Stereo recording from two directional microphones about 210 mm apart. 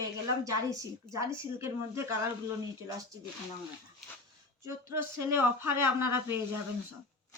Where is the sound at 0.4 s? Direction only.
15° right (ahead or behind).